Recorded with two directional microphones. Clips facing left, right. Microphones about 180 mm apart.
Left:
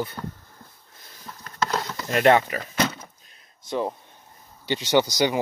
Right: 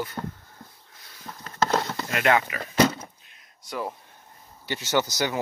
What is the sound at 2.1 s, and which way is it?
Speech, 35° left (ahead or behind).